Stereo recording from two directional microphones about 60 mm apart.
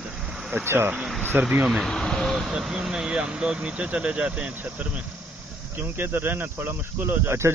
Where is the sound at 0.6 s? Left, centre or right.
Right.